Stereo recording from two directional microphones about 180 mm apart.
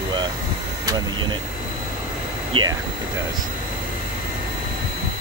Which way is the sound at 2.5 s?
25° right (ahead or behind).